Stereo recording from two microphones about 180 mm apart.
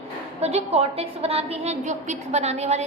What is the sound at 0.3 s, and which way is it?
A woman's voice, 35° right (ahead or behind).